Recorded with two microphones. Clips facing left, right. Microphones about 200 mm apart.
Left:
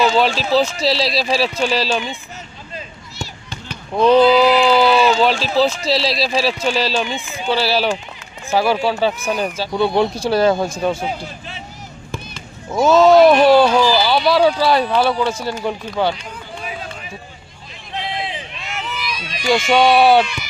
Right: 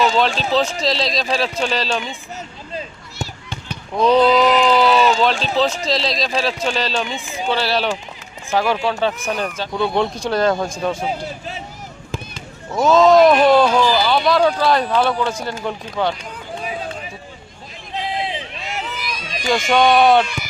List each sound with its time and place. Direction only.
0.0 s speech: 5° left (ahead or behind)
4.2 s speech: 5° left (ahead or behind)
12.7 s speech: 5° left (ahead or behind)
18.5 s run: 40° right (ahead or behind)
19.5 s speech: centre (ahead or behind)
20.2 s a sound: 50° right (ahead or behind)